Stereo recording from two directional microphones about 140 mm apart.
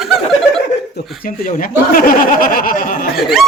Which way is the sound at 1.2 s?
85° left.